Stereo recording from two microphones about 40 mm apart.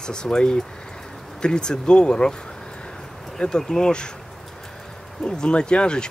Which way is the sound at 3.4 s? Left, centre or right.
Centre.